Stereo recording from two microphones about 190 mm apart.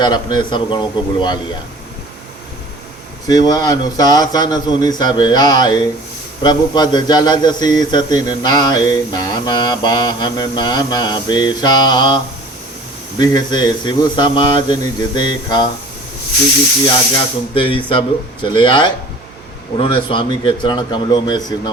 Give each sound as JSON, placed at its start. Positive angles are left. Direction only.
{"t": 0.0, "sound": "a man's voice", "side_deg": 20}
{"t": 3.2, "sound": "a man's voice", "side_deg": 20}
{"t": 17.2, "sound": "a man's voice", "side_deg": 30}